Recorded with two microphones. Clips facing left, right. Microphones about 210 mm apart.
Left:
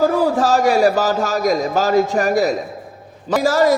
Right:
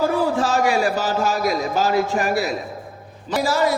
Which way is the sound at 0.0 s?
40° left (ahead or behind).